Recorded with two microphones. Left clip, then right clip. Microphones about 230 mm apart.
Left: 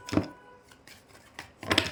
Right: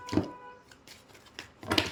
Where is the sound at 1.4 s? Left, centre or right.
Left.